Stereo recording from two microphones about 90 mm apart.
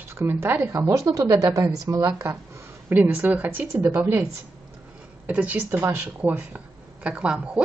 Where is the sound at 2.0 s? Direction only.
30° right (ahead or behind).